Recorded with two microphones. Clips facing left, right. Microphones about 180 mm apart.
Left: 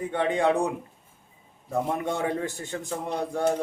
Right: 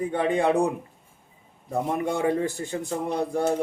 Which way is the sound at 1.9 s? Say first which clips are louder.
Right 5 dB; 10° right (ahead or behind).